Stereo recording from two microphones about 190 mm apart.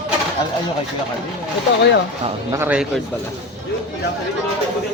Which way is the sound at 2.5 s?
10° right (ahead or behind).